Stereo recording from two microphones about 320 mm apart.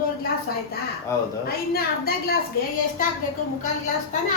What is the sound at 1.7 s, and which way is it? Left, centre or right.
Speech, left.